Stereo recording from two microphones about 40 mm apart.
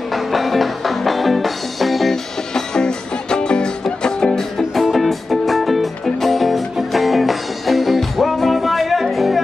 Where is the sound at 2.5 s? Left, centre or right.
Centre.